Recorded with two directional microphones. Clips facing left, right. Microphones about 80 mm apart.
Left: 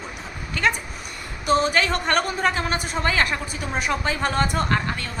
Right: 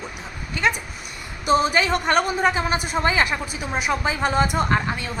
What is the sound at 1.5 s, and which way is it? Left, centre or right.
A woman's voice, centre.